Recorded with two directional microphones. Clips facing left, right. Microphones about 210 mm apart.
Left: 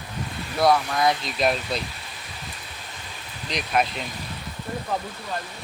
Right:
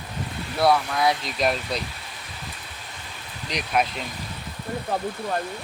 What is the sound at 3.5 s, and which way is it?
Speech, 10° right (ahead or behind).